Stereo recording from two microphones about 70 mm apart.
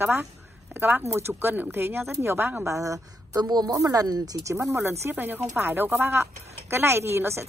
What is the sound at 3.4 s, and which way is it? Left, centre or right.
Speech, right.